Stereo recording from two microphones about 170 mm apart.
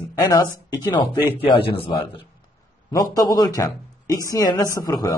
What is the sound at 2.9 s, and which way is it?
Speech, 20° left (ahead or behind).